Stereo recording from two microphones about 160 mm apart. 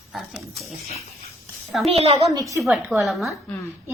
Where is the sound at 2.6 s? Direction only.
10° right (ahead or behind).